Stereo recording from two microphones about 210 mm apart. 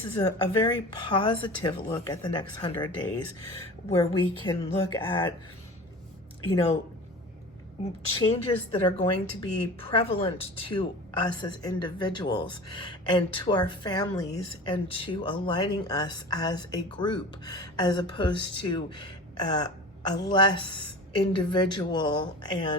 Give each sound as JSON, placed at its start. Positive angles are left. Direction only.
{"t": 0.1, "sound": "a woman's voice", "side_deg": 15}
{"t": 8.2, "sound": "a woman's voice", "side_deg": 25}